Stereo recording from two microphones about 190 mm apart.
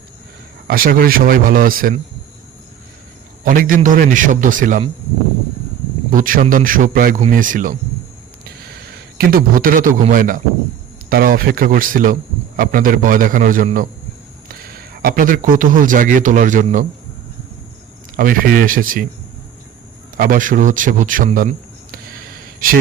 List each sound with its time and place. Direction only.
0.7 s a man's voice: 50° right (ahead or behind)
3.4 s a man's voice: 45° right (ahead or behind)
6.1 s a man's voice: 45° right (ahead or behind)
18.2 s a man's voice: 45° right (ahead or behind)
20.1 s a man's voice: 45° right (ahead or behind)
21.9 s a sound: 50° right (ahead or behind)